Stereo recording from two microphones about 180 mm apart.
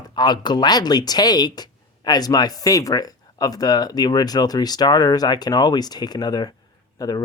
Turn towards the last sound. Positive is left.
turn(degrees=20)  # may be behind; listen again after turning